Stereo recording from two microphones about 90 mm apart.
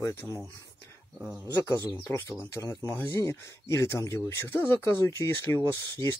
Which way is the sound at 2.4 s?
35° left (ahead or behind).